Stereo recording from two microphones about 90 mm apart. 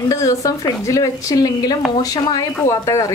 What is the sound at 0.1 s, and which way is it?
Speech, 35° left (ahead or behind).